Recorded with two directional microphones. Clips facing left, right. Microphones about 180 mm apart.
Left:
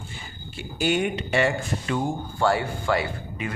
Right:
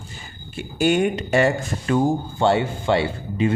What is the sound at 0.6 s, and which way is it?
Speech, 50° right (ahead or behind).